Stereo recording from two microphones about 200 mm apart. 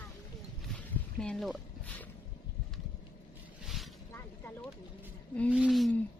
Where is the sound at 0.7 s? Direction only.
5° left (ahead or behind).